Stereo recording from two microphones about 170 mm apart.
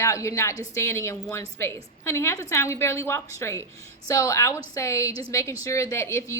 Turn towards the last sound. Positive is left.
turn(degrees=15)  # may be behind; listen again after turning